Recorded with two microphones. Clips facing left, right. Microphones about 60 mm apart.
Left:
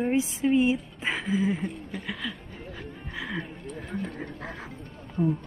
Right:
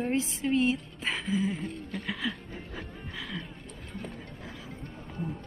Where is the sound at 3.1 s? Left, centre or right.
Centre.